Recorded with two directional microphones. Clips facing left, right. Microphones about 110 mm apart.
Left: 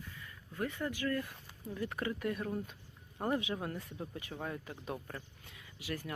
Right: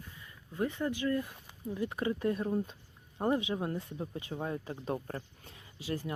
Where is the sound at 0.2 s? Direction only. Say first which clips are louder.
Right 5 dB; 20° right (ahead or behind).